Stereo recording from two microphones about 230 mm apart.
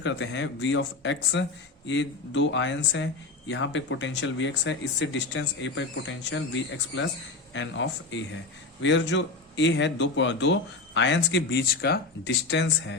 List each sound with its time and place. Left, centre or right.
0.0 s speech: left
7.5 s speech: left